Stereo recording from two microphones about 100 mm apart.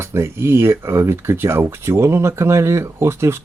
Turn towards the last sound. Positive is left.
turn(degrees=-25)  # may be behind; listen again after turning